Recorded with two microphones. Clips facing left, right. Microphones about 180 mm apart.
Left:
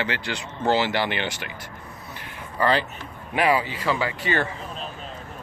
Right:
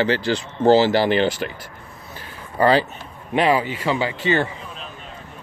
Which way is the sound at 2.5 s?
35° right (ahead or behind).